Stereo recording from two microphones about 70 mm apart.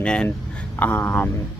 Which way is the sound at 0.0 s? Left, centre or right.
Centre.